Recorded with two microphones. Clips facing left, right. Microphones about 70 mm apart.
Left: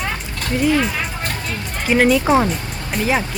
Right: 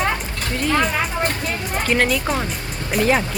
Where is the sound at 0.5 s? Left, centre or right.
Centre.